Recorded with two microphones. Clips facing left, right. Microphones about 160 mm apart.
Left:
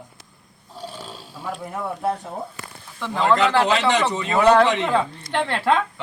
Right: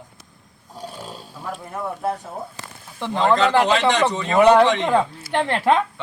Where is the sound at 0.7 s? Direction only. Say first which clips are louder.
Right 1 dB; 15° right (ahead or behind).